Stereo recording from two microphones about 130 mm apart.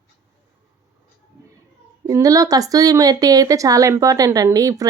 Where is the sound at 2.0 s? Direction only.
25° right (ahead or behind).